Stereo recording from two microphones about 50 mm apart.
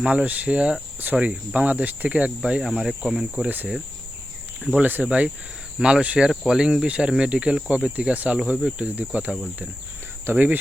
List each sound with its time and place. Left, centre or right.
0.0 s cricket: centre
2.4 s speech: centre
4.8 s speech: right
5.0 s cricket: right
8.4 s speech: centre
9.0 s cricket: right
10.3 s speech: right